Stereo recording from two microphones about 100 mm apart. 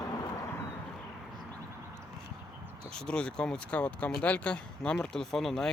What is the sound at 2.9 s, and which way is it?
Speech, 10° left (ahead or behind).